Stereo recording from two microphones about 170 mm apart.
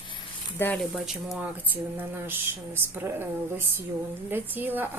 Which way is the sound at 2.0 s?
10° right (ahead or behind).